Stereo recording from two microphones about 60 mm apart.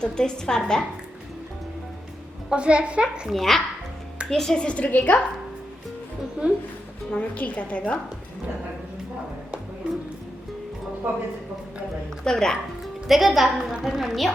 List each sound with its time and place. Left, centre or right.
0.0 s a woman's voice: centre
2.5 s a woman's voice: centre
3.3 s a woman's voice: centre
4.9 s speech: left
6.4 s speech: right
7.1 s a woman's voice: left
12.2 s a woman's voice: centre
13.1 s a woman's voice: centre